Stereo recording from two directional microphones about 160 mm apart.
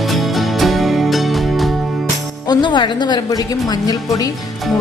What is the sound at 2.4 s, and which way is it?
A woman's voice, 30° left (ahead or behind).